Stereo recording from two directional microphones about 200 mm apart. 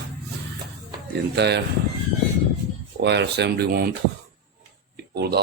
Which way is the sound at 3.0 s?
60° right (ahead or behind).